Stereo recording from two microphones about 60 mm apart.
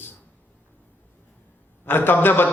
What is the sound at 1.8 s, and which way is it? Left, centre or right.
Speech, left.